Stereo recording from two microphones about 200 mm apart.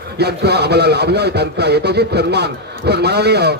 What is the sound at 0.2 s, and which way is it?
A man's voice, 55° right (ahead or behind).